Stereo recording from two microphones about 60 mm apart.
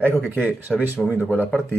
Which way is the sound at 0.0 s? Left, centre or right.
Right.